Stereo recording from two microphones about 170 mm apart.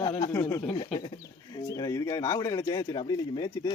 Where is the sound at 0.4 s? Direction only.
25° left (ahead or behind).